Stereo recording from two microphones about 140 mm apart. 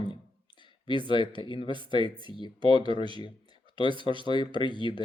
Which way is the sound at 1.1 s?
35° left (ahead or behind).